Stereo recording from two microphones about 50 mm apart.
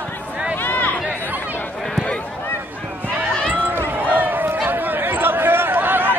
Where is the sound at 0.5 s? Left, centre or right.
Left.